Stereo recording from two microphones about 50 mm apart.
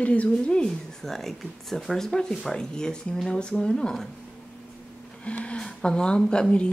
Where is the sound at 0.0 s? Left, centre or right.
Left.